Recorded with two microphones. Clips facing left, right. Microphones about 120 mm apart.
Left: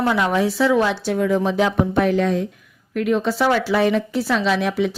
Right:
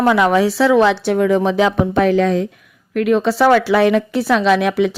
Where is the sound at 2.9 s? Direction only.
75° right (ahead or behind).